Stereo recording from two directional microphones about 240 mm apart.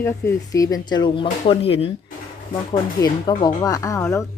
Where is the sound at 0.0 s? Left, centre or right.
Centre.